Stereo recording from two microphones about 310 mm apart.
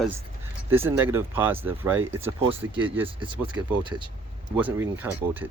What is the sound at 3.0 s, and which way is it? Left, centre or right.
Speech, centre.